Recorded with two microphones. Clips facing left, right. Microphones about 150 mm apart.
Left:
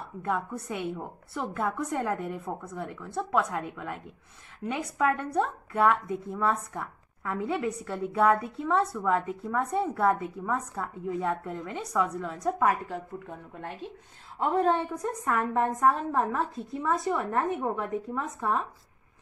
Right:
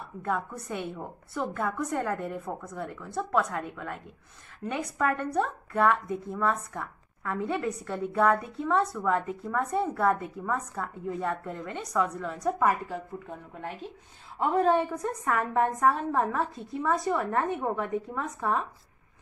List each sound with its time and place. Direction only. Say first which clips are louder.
0.2 s a woman's voice: even; 5° left (ahead or behind)